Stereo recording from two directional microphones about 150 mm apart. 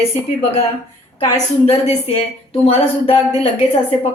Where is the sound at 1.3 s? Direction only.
45° left (ahead or behind).